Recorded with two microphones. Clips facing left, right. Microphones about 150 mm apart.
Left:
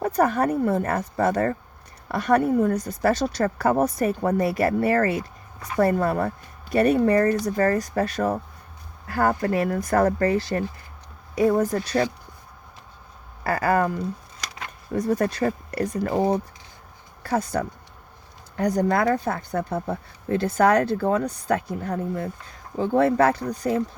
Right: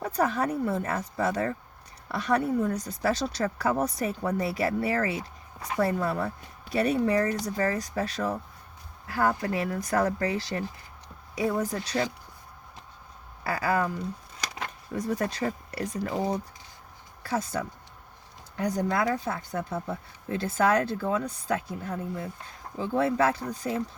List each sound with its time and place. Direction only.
0.0 s speech: 55° left (ahead or behind)
13.4 s speech: 55° left (ahead or behind); by 21.3 s 70° left (ahead or behind)
21.4 s speech: 50° left (ahead or behind)